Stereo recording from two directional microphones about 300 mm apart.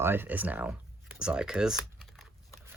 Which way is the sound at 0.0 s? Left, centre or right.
Centre.